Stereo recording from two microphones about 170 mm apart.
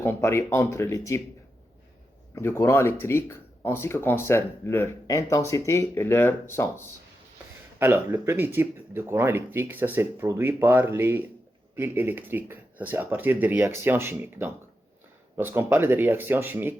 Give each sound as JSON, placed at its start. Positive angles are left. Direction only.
{"t": 0.0, "sound": "speech", "side_deg": 15}
{"t": 2.3, "sound": "speech", "side_deg": 15}
{"t": 7.8, "sound": "speech", "side_deg": -15}